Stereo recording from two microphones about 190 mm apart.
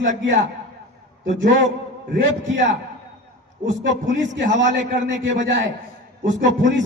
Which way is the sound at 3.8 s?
70° right (ahead or behind).